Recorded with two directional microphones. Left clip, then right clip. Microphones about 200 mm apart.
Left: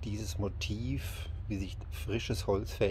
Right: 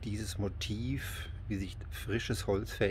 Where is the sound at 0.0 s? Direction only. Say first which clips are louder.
Even; 10° right (ahead or behind).